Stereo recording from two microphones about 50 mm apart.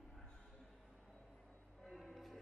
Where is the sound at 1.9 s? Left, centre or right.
Centre.